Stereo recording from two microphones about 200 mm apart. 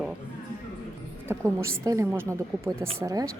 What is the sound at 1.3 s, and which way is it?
Speech, 15° right (ahead or behind).